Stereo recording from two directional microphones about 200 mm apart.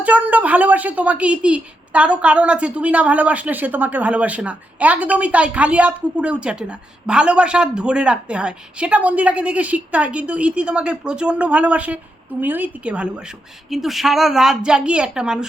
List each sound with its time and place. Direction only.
0.0 s a woman's voice: 5° right (ahead or behind)